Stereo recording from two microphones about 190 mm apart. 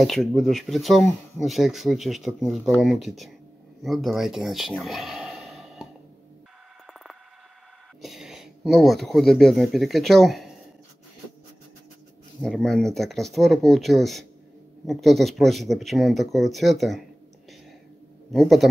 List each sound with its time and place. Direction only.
0.0 s speech: centre (ahead or behind)
6.9 s mouse: centre (ahead or behind)
8.0 s speech: centre (ahead or behind)
12.4 s speech: 5° left (ahead or behind)
18.3 s speech: centre (ahead or behind)